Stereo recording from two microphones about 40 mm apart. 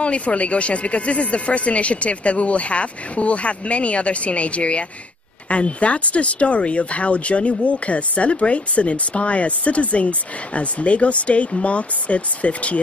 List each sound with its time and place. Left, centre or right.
0.0 s speech: left